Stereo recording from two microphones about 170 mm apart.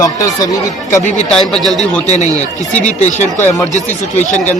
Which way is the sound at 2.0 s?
40° left (ahead or behind).